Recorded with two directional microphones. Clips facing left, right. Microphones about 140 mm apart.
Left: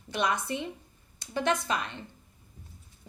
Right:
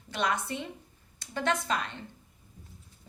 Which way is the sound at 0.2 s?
15° left (ahead or behind).